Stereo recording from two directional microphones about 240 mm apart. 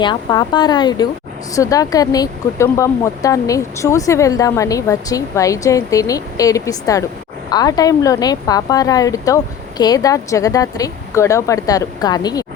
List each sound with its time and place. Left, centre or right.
0.0 s speech: centre